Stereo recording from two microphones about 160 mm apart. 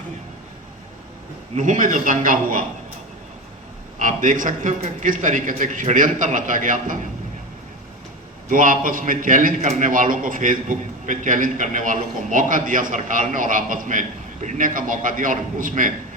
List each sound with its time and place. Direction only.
1.5 s a man's voice: 55° right (ahead or behind)
3.9 s a man's voice: 55° right (ahead or behind)
8.4 s a man's voice: 55° right (ahead or behind)